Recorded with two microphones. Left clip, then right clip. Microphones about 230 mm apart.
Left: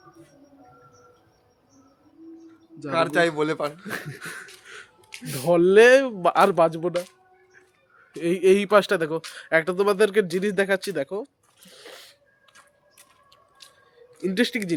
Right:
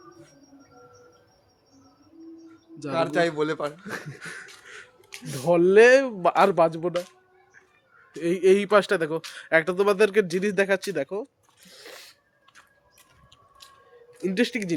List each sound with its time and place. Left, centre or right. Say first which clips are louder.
2.9 s a man's voice: left 2 dB; centre
4.2 s beatboxing: left 2 dB; centre
5.2 s speech: left 2 dB; left
5.5 s speech: left 1 dB; centre
8.2 s speech: left 1 dB; centre
14.2 s speech: left 1 dB; centre